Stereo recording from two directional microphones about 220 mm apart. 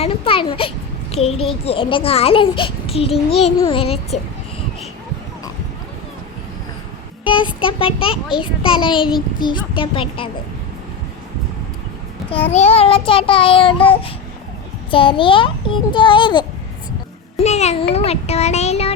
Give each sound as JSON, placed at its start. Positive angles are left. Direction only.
{"t": 0.0, "sound": "a sound", "side_deg": 25}
{"t": 1.1, "sound": "a child's voice", "side_deg": 30}
{"t": 7.3, "sound": "a child's voice", "side_deg": 20}
{"t": 12.5, "sound": "a child's voice", "side_deg": 30}
{"t": 17.3, "sound": "a sound", "side_deg": 30}
{"t": 17.9, "sound": "a child's voice", "side_deg": 30}